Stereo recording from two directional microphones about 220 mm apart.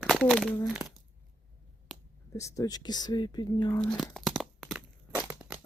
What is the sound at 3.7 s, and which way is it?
Crumpling, 5° left (ahead or behind).